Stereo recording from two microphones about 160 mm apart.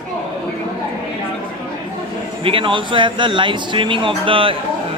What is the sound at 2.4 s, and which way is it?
Speech, 35° right (ahead or behind).